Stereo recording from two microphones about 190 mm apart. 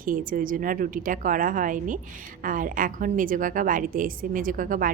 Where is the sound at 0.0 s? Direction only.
45° right (ahead or behind).